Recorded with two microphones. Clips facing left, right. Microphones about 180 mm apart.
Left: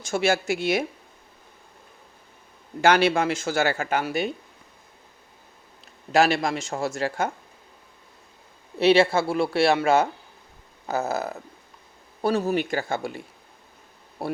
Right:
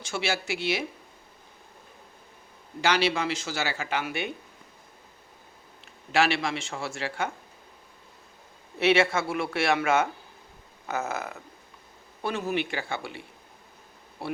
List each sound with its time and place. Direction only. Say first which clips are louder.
0.0 s speech: left 7 dB; 45° left (ahead or behind)
2.8 s speech: left 6 dB; 50° left (ahead or behind)
5.8 s speech: left 4 dB; 40° left (ahead or behind)
8.8 s speech: left 5 dB; 35° left (ahead or behind)